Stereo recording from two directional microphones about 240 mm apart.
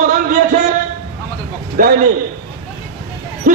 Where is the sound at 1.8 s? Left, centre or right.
Right.